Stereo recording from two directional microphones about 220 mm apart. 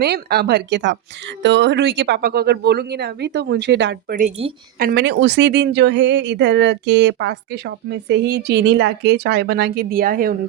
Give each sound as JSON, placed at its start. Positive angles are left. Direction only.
{"t": 0.0, "sound": "speech", "side_deg": -45}